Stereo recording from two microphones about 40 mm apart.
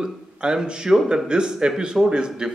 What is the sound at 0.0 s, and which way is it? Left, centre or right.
A man's voice, centre.